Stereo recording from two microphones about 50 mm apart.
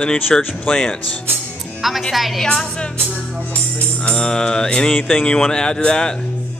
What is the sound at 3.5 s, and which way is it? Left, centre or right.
Music, left.